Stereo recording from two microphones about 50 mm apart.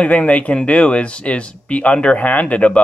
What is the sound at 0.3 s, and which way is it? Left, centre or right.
Speech, left.